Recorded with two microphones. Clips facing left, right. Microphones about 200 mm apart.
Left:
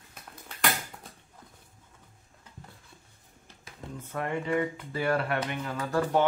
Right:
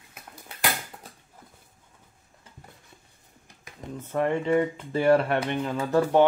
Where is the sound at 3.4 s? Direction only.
15° right (ahead or behind).